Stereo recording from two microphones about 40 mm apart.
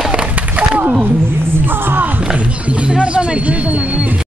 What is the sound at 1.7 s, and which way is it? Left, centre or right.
Music, right.